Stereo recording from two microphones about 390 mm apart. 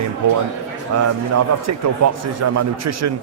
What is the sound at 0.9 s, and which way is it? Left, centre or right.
A man's voice, right.